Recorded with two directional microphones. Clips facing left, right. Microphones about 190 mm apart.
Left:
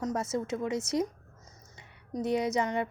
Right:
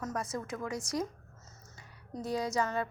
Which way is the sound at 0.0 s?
25° left (ahead or behind).